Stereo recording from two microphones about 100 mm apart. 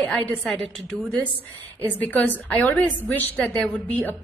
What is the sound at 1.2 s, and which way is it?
A woman's voice, 15° left (ahead or behind).